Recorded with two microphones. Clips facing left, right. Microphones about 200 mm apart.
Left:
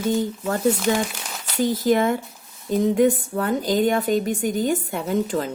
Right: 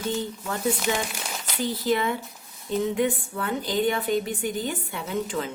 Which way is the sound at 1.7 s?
45° left (ahead or behind).